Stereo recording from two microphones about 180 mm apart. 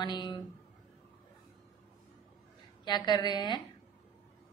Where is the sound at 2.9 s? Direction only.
25° left (ahead or behind).